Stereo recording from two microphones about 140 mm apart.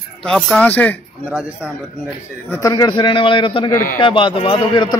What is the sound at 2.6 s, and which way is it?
A man's voice, 25° left (ahead or behind).